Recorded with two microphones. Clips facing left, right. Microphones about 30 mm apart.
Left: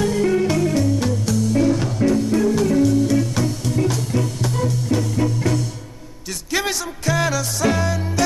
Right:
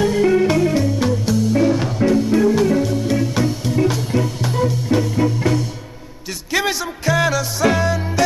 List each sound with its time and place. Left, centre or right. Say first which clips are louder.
0.0 s music: right 3 dB; centre